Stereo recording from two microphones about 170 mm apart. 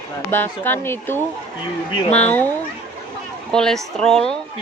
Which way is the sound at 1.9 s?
30° left (ahead or behind).